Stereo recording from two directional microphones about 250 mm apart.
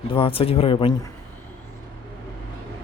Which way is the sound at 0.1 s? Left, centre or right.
Left.